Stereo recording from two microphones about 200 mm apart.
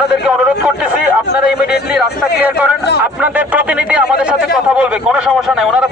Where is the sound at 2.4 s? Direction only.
10° right (ahead or behind).